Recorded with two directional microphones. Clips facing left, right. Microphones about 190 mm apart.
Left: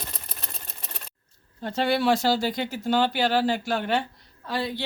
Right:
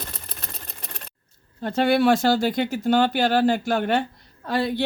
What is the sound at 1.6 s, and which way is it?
Speech, 55° right (ahead or behind).